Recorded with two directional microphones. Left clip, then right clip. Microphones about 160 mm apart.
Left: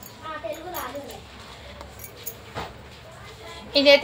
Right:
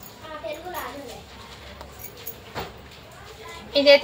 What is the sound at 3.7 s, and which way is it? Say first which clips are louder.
Speech: right 1 dB; 20° left (ahead or behind).